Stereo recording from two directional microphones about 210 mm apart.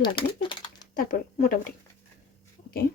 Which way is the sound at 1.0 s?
40° left (ahead or behind).